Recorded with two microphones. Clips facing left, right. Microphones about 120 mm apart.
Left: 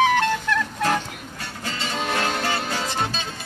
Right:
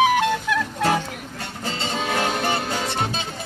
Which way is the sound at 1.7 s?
30° right (ahead or behind).